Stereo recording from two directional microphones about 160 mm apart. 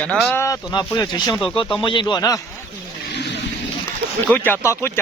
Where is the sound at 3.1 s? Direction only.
90° left.